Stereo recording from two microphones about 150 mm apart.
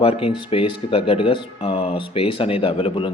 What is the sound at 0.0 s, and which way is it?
Speech, 40° left (ahead or behind).